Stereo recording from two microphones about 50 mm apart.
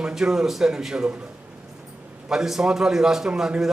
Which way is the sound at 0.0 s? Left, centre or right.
Centre.